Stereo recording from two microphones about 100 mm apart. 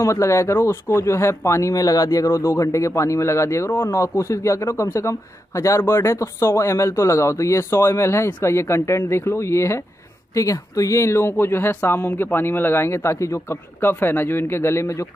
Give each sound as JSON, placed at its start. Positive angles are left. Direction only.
{"t": 0.0, "sound": "speech", "side_deg": 30}